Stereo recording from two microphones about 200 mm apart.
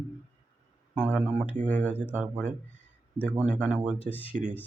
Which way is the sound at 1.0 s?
5° right (ahead or behind).